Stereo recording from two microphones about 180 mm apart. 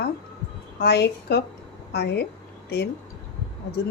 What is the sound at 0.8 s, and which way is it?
Speech, 65° left (ahead or behind).